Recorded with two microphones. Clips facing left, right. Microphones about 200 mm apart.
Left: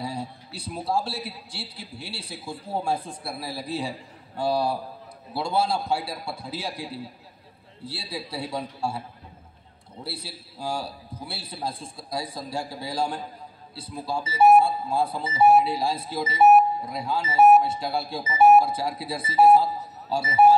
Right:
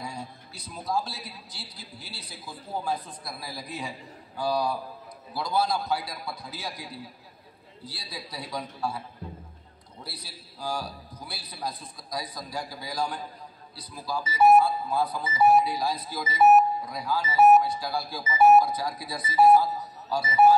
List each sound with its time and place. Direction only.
0.0 s speech: 30° left (ahead or behind)
10.0 s speech: 25° left (ahead or behind)